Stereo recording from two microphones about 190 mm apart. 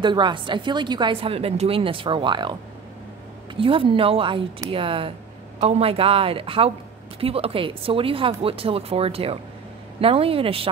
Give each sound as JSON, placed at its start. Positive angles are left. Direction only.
{"t": 0.0, "sound": "a woman's voice", "side_deg": -25}
{"t": 3.5, "sound": "a woman's voice", "side_deg": -30}